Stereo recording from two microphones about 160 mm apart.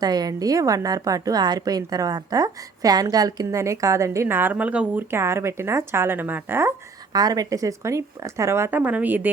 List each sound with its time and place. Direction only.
0.0 s a woman's voice: 25° right (ahead or behind)